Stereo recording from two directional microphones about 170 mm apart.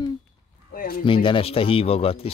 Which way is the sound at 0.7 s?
55° left (ahead or behind).